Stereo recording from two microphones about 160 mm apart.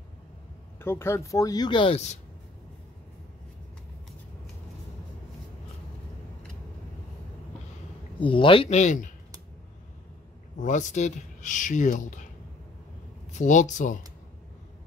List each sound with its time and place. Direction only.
0.7 s speech: 15° left (ahead or behind)
8.2 s speech: 30° left (ahead or behind); by 9.1 s 50° left (ahead or behind)
10.6 s speech: 50° left (ahead or behind)
13.3 s speech: 50° left (ahead or behind)